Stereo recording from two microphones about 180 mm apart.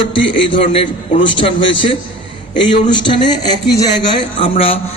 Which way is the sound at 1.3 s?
25° left (ahead or behind).